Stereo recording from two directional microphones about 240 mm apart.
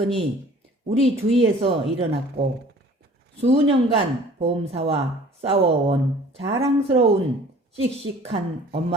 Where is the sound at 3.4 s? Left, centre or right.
Right.